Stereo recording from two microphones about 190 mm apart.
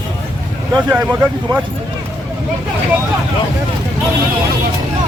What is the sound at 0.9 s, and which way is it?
Speech, 10° right (ahead or behind).